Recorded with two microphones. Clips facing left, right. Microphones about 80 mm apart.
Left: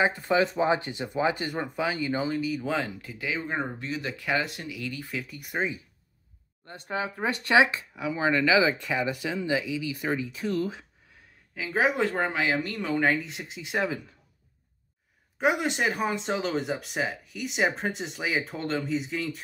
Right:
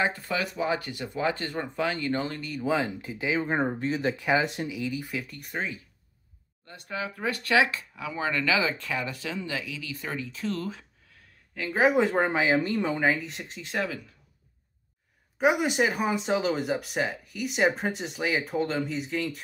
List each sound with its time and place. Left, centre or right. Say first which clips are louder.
0.0 s speech: left 4 dB; left; by 2.6 s centre
2.6 s speech: right 3 dB; centre
3.0 s speech: right 4 dB; right
3.3 s speech: right 5 dB; right; by 5.1 s centre
5.1 s speech: left 1 dB; centre
6.6 s speech: left 3 dB; left; by 10.9 s centre
11.5 s speech: right 2 dB; centre
12.0 s speech: right 3 dB; centre
13.0 s speech: even; centre
15.3 s speech: right 2 dB; centre